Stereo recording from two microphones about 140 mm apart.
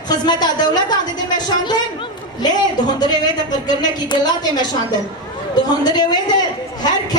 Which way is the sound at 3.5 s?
30° left (ahead or behind).